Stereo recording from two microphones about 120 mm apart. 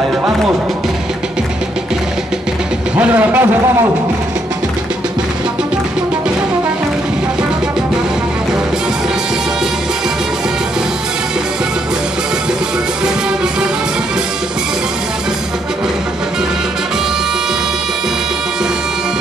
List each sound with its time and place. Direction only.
3.0 s speech: 15° right (ahead or behind)